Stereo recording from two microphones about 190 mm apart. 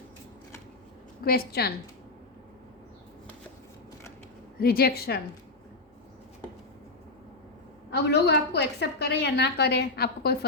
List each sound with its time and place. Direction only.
1.2 s a woman's voice: 55° left (ahead or behind)
4.6 s a woman's voice: 55° left (ahead or behind)
7.9 s a woman's voice: 60° left (ahead or behind)